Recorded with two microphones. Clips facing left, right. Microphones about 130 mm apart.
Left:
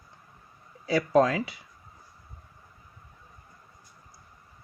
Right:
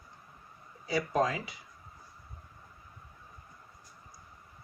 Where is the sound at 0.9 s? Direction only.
90° left.